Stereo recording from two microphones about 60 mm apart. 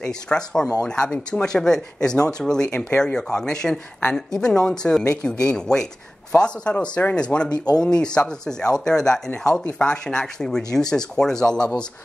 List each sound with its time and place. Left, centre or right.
0.0 s speech: centre